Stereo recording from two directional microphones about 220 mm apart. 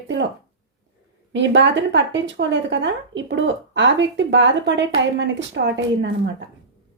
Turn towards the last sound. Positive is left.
turn(degrees=-55)  # may be behind; listen again after turning